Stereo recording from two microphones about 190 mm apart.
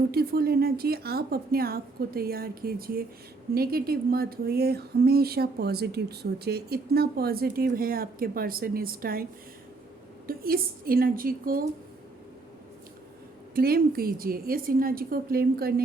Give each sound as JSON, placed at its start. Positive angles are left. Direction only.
{"t": 0.1, "sound": "speech", "side_deg": -55}
{"t": 10.2, "sound": "speech", "side_deg": -50}
{"t": 13.6, "sound": "speech", "side_deg": -50}